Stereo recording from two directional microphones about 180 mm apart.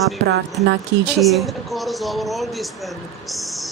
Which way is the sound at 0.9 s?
85° right.